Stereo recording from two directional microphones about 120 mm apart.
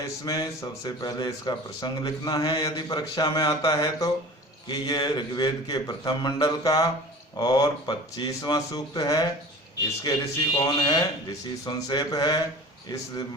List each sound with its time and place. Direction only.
0.3 s speech: 30° left (ahead or behind)